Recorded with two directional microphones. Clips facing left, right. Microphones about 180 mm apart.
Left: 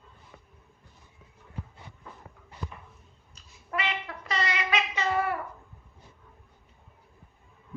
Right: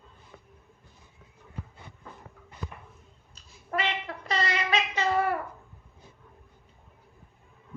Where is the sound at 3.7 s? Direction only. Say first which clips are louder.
Right 2 dB; 35° right (ahead or behind).